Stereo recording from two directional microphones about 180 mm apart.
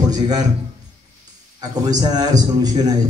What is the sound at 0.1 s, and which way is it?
Speech, 20° right (ahead or behind).